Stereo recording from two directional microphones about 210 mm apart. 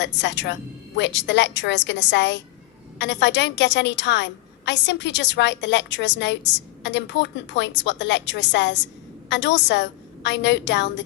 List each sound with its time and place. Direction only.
0.0 s a woman's voice: 55° left (ahead or behind)